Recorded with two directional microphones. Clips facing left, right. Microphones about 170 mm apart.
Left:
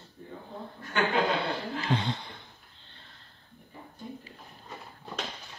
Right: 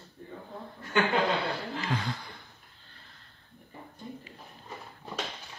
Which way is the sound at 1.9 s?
25° left (ahead or behind).